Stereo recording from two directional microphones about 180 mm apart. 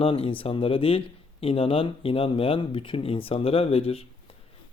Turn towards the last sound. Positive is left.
turn(degrees=35)  # may be behind; listen again after turning